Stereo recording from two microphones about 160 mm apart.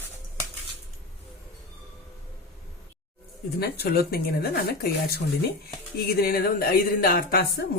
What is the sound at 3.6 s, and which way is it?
Speech, 75° left (ahead or behind).